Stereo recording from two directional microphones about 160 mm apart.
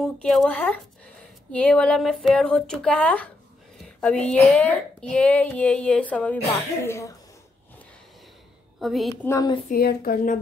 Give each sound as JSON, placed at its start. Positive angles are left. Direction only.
{"t": 0.0, "sound": "a woman's voice", "side_deg": 5}
{"t": 8.7, "sound": "a woman's voice", "side_deg": 0}
{"t": 9.2, "sound": "a woman's voice", "side_deg": 20}
{"t": 9.7, "sound": "a woman's voice", "side_deg": 70}